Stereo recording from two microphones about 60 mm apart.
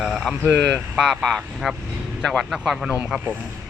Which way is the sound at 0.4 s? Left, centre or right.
Centre.